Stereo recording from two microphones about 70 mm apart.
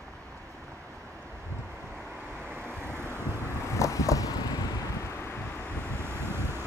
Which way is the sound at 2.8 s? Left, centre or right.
Right.